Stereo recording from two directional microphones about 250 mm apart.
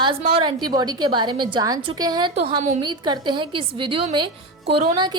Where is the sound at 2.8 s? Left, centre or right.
Centre.